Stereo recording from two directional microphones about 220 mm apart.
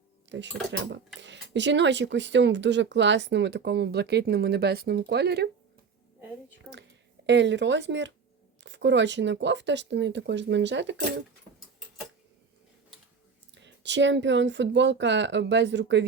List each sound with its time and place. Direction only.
0.3 s speech: 55° right (ahead or behind)
7.3 s speech: 55° right (ahead or behind)
13.5 s speech: 55° right (ahead or behind)